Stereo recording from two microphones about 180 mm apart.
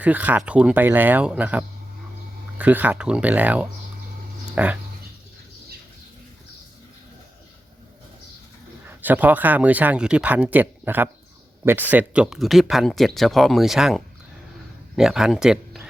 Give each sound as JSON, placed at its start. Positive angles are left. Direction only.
{"t": 0.0, "sound": "speech", "side_deg": -10}
{"t": 8.9, "sound": "speech", "side_deg": -10}